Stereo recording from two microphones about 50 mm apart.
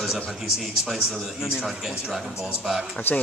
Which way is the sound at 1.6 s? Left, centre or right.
Centre.